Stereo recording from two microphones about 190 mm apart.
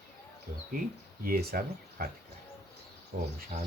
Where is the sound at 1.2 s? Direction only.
50° right (ahead or behind).